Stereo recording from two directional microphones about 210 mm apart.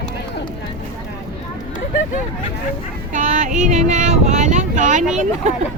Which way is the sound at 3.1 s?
35° right (ahead or behind).